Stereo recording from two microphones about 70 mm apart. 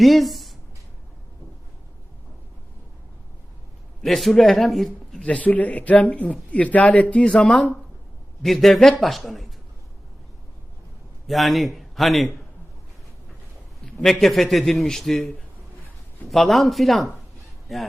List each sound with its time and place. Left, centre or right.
0.0 s speech: centre
4.0 s a man's voice: centre
5.2 s a man's voice: centre
11.3 s a man's voice: centre
13.8 s a man's voice: centre
16.3 s a man's voice: centre